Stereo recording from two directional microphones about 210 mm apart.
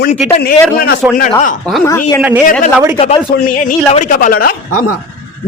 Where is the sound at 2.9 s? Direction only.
30° left (ahead or behind).